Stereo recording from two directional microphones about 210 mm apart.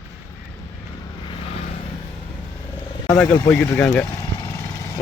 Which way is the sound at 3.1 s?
10° left (ahead or behind).